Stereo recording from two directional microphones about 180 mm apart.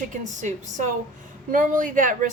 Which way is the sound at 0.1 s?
45° right (ahead or behind).